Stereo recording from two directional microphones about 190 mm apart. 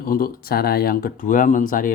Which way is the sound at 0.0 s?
50° left (ahead or behind).